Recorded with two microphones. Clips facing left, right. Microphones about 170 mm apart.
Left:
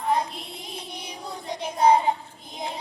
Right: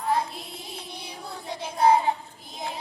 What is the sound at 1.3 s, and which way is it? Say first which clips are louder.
Child singing: left 3 dB; 20° left (ahead or behind).